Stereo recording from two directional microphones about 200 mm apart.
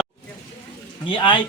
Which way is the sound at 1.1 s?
25° left (ahead or behind).